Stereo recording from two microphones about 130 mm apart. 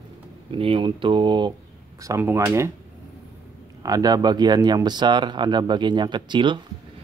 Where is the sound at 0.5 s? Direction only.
40° right (ahead or behind).